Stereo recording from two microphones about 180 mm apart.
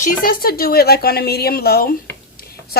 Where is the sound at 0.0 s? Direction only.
55° left (ahead or behind).